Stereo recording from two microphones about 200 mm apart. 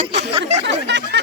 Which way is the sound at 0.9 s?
60° right (ahead or behind).